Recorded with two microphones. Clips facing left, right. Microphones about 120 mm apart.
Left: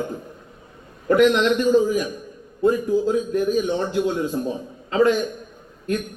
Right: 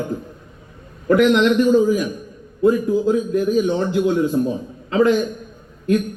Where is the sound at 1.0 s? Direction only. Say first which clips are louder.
Right 2 dB; 35° left (ahead or behind).